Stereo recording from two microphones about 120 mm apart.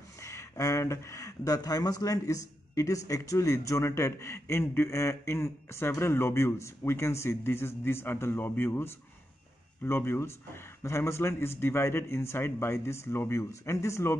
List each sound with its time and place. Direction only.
0.2 s speech: 25° left (ahead or behind)